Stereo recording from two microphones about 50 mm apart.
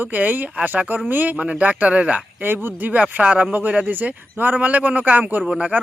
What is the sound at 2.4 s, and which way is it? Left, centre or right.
Speech, right.